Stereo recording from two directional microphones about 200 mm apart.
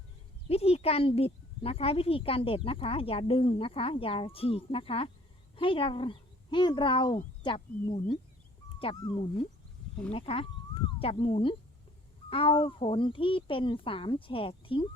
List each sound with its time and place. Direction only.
0.4 s speech: 30° left (ahead or behind)